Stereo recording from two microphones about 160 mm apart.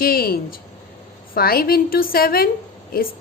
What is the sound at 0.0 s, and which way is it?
A woman's voice, 70° left (ahead or behind).